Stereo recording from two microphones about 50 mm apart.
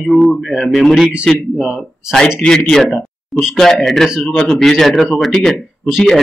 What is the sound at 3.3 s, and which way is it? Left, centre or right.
Speech, centre.